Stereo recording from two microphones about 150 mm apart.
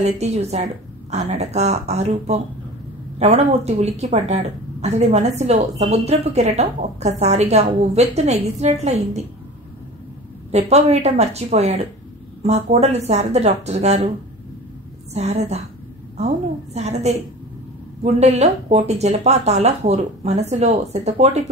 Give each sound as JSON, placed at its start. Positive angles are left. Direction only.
{"t": 0.0, "sound": "speech", "side_deg": -45}
{"t": 10.5, "sound": "speech", "side_deg": -45}
{"t": 15.1, "sound": "speech", "side_deg": -45}
{"t": 16.7, "sound": "speech", "side_deg": -45}